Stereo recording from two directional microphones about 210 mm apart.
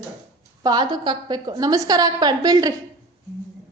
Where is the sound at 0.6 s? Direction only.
20° right (ahead or behind).